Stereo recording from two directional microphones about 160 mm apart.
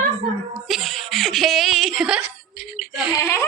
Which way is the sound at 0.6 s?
Centre (ahead or behind).